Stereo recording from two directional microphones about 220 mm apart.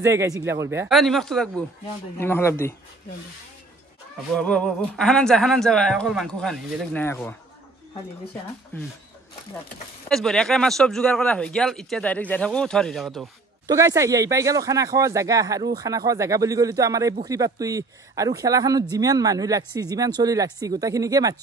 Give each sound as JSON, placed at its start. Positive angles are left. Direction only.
{"t": 0.0, "sound": "speech", "side_deg": -15}
{"t": 0.8, "sound": "speech", "side_deg": 0}
{"t": 4.4, "sound": "speech", "side_deg": 5}
{"t": 10.0, "sound": "speech", "side_deg": 0}
{"t": 13.7, "sound": "speech", "side_deg": -15}